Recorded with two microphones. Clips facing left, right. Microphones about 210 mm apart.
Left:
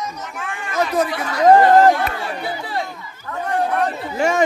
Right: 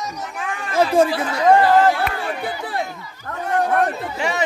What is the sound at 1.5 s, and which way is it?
Speech, 40° left (ahead or behind).